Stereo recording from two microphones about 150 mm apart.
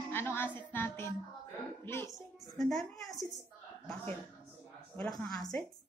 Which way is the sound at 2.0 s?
Centre (ahead or behind).